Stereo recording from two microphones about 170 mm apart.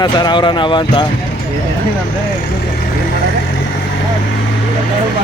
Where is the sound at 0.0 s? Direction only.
25° left (ahead or behind).